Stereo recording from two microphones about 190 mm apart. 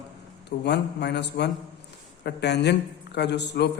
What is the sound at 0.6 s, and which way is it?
A man's voice, 60° left (ahead or behind).